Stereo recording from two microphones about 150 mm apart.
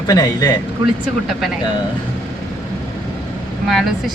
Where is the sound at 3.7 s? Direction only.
Centre (ahead or behind).